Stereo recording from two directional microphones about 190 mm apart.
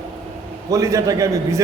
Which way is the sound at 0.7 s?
20° right (ahead or behind).